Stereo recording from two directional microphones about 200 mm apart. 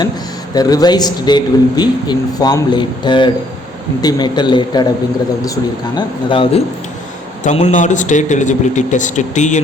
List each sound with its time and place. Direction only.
0.5 s a man's voice: 20° left (ahead or behind)
6.0 s a man's voice: 25° left (ahead or behind)
7.4 s a man's voice: 35° left (ahead or behind)